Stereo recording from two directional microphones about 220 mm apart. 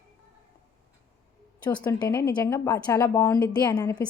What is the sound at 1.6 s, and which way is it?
A woman's voice, 20° left (ahead or behind).